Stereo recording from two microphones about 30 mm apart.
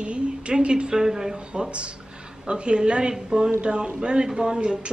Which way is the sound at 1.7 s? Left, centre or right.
Right.